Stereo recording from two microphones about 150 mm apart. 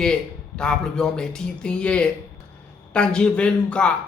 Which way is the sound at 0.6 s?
5° left (ahead or behind).